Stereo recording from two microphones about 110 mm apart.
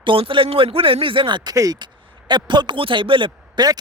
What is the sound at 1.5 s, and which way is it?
Speech, 35° right (ahead or behind).